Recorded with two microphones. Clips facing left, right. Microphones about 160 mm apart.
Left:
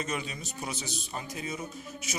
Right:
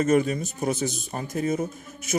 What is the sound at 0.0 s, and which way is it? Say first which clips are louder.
A man's voice: right 14 dB; 50° right (ahead or behind).